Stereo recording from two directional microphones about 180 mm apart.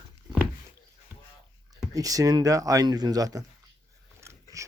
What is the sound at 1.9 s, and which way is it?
Speech, 20° right (ahead or behind).